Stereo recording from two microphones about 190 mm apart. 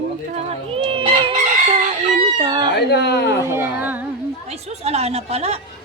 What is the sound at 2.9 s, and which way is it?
Speech, 60° left (ahead or behind).